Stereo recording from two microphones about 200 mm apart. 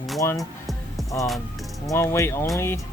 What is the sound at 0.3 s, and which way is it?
Music, centre (ahead or behind).